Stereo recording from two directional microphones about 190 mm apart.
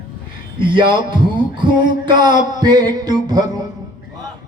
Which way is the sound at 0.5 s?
25° right (ahead or behind).